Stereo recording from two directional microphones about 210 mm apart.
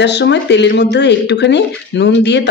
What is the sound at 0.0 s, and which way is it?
Speech, 55° left (ahead or behind).